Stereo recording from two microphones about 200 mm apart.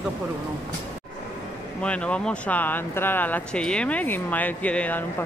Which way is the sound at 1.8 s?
5° left (ahead or behind).